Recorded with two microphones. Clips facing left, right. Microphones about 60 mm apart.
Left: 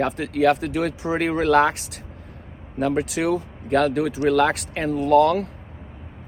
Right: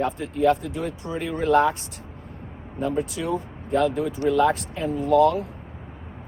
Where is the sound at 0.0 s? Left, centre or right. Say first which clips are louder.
Left 2 dB; left.